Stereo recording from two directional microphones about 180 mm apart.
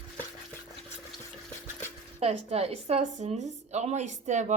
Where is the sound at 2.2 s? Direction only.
35° right (ahead or behind).